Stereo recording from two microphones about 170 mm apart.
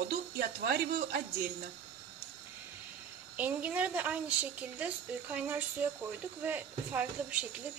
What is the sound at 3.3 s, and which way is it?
A woman's voice, 10° right (ahead or behind).